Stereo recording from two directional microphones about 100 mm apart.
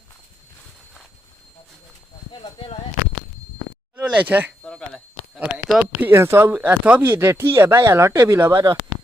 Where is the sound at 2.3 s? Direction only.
55° left (ahead or behind).